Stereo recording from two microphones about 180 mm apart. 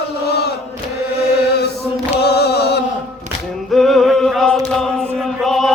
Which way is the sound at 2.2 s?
65° left (ahead or behind).